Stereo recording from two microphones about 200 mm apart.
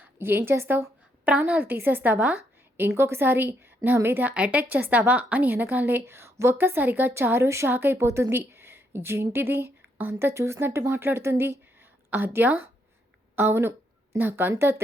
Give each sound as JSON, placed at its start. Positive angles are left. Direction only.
{"t": 0.0, "sound": "a woman's voice", "side_deg": -10}